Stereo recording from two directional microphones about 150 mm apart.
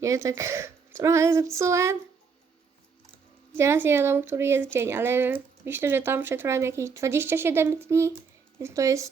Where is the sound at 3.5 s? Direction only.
15° right (ahead or behind).